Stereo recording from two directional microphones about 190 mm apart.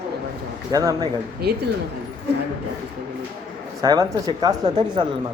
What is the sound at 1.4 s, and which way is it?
Speech, 55° right (ahead or behind).